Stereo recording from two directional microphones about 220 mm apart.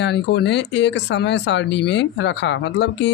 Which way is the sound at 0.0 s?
50° left (ahead or behind).